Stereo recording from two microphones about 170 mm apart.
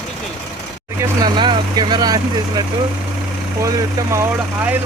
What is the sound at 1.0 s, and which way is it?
Speech, 25° right (ahead or behind).